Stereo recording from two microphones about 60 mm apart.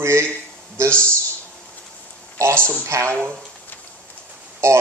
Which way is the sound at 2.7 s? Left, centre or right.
Right.